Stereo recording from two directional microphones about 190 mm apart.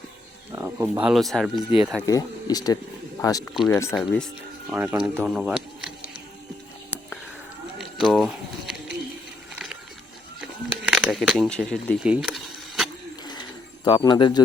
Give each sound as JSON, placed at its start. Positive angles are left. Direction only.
{"t": 0.5, "sound": "speech", "side_deg": -10}
{"t": 2.0, "sound": "speech", "side_deg": 20}
{"t": 3.5, "sound": "speech", "side_deg": 0}
{"t": 4.7, "sound": "speech", "side_deg": -10}
{"t": 5.1, "sound": "a sound", "side_deg": 0}
{"t": 7.8, "sound": "bird", "side_deg": 0}
{"t": 10.8, "sound": "speech", "side_deg": -5}
{"t": 12.1, "sound": "mechanisms", "side_deg": -5}
{"t": 13.8, "sound": "speech", "side_deg": 25}